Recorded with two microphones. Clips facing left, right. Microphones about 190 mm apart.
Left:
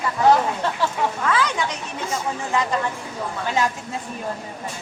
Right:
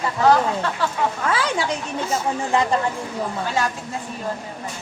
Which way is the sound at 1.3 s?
30° right (ahead or behind).